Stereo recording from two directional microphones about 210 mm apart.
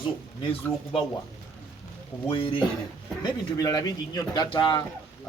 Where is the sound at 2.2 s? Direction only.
25° left (ahead or behind).